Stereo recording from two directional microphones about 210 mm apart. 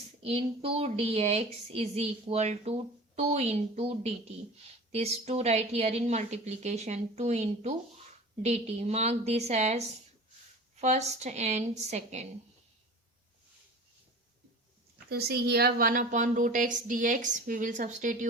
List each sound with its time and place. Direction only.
0.2 s a woman's voice: 30° right (ahead or behind)
15.1 s a woman's voice: 50° right (ahead or behind)